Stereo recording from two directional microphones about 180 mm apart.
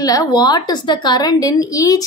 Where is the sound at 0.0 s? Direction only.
20° left (ahead or behind).